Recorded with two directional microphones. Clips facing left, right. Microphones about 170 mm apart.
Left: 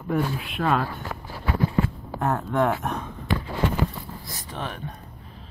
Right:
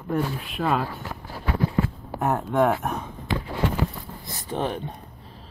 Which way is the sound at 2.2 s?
15° right (ahead or behind).